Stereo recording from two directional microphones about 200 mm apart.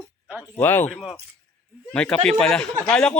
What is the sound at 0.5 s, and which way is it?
A woman's voice, 10° left (ahead or behind).